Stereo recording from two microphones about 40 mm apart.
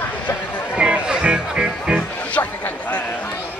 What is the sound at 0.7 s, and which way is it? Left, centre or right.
Music, right.